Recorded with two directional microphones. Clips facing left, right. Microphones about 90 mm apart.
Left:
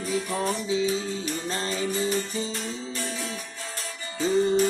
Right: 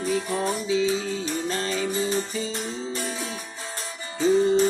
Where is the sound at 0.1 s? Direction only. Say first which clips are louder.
Right 1 dB; 25° right (ahead or behind).